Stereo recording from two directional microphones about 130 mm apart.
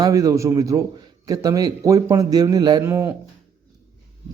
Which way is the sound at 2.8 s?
20° right (ahead or behind).